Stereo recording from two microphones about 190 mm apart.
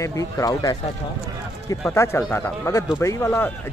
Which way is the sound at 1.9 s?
15° left (ahead or behind).